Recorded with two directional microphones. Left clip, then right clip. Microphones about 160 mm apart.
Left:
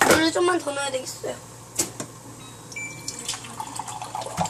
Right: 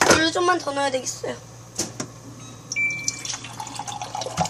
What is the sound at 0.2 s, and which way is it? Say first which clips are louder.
Speech: right 1 dB; 5° left (ahead or behind).